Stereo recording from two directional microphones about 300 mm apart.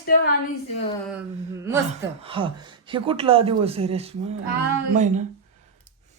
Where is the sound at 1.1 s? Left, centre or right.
Centre; by 5.2 s right.